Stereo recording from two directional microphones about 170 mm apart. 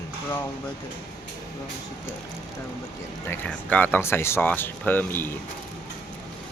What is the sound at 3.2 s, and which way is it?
Speech, 10° left (ahead or behind).